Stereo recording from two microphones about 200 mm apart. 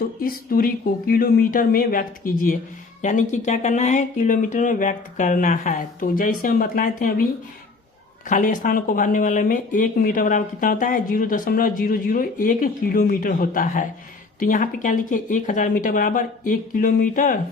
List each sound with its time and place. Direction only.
0.2 s speech: 45° left (ahead or behind)
8.3 s speech: 40° left (ahead or behind)